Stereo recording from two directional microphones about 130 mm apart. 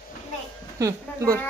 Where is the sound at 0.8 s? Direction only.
25° right (ahead or behind).